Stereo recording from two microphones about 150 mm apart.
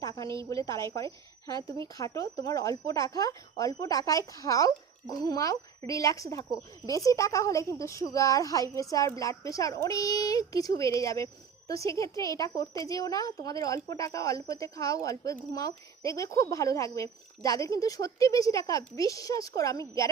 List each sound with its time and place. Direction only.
0.0 s a woman's voice: 20° left (ahead or behind)